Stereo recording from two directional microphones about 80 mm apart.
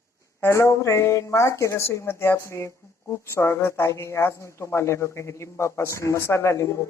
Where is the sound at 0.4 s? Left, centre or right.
Left.